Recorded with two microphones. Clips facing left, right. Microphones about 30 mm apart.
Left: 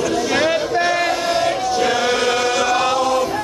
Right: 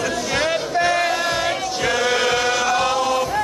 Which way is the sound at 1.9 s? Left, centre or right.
Centre.